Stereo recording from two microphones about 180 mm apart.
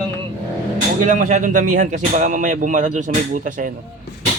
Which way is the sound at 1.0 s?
45° right (ahead or behind).